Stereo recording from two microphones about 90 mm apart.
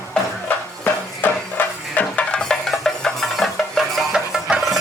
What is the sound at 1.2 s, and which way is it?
Music, 20° left (ahead or behind).